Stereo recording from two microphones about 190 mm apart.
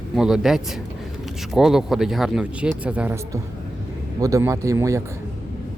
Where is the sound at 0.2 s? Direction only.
5° right (ahead or behind).